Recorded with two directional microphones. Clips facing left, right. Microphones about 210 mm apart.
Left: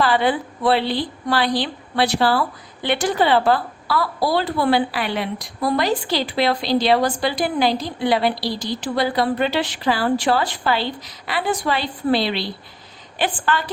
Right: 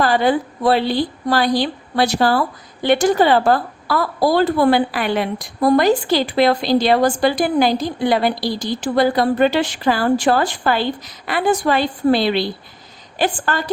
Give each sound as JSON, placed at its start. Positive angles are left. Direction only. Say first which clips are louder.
{"t": 0.0, "sound": "a woman's voice", "louder": "right 3 dB", "side_deg": -45}